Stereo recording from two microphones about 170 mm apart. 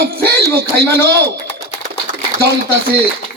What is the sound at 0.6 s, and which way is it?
A man's voice, 70° right (ahead or behind).